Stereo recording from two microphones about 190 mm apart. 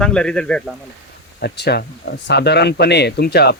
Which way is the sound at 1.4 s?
60° left (ahead or behind).